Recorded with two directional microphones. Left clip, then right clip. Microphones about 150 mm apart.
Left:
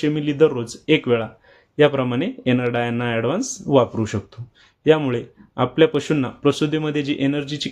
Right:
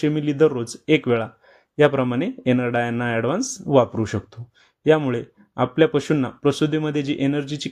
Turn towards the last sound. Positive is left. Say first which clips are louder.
# left 1 dB
turn(degrees=-35)  # may be behind; listen again after turning